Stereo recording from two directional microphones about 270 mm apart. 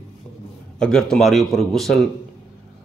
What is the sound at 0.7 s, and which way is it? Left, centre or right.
A man's voice, centre.